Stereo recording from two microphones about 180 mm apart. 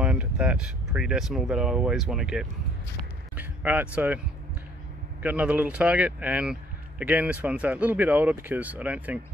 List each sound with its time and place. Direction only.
0.0 s speech: 5° right (ahead or behind)
5.2 s speech: 5° right (ahead or behind)